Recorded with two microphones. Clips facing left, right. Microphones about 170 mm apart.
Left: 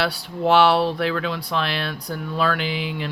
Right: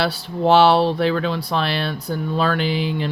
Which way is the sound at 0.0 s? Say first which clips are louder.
Right 3 dB; 30° right (ahead or behind).